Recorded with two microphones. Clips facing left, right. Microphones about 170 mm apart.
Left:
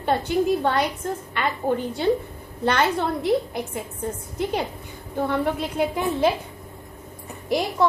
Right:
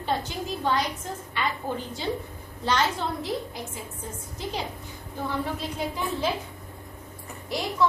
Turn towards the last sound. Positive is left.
turn(degrees=55)  # may be behind; listen again after turning